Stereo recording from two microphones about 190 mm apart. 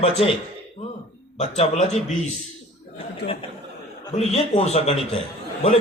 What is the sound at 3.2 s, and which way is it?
Speech, 60° left (ahead or behind).